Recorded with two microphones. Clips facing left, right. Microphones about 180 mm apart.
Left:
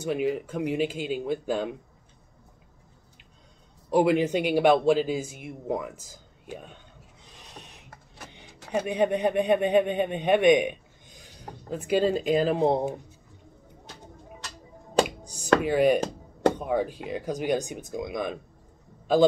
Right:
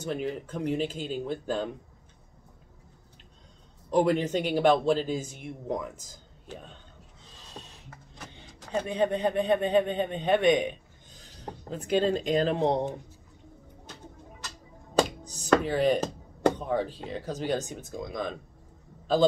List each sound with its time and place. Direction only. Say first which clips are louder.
0.0 s speech: left 5 dB; 10° left (ahead or behind)
3.9 s speech: left 2 dB; 10° left (ahead or behind)
7.3 s a sound: right 1 dB; 15° left (ahead or behind)
8.5 s a man's voice: left 2 dB; 10° left (ahead or behind)
15.0 s finger snapping: left 1 dB; 10° left (ahead or behind)
15.6 s speech: left 3 dB; 10° left (ahead or behind)